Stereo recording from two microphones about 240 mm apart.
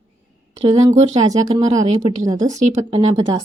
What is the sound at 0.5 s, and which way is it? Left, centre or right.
A woman's voice, right.